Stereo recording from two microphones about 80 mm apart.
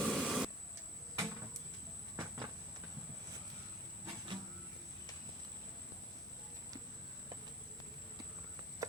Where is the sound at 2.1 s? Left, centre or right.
Right.